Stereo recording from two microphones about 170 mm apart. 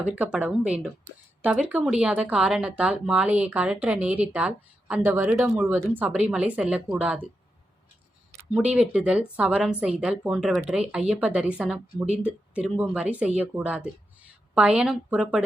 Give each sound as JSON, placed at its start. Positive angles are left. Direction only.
{"t": 0.0, "sound": "speech", "side_deg": -10}
{"t": 8.4, "sound": "speech", "side_deg": -5}